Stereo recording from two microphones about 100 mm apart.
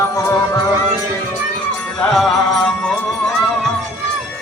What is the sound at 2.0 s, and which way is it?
Music, 5° left (ahead or behind).